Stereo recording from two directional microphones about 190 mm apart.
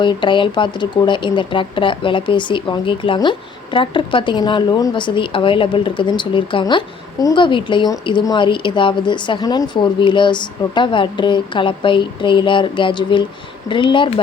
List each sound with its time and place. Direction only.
0.0 s speech: 25° left (ahead or behind)